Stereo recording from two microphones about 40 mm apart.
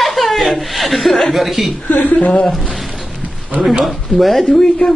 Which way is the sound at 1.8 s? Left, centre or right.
Left.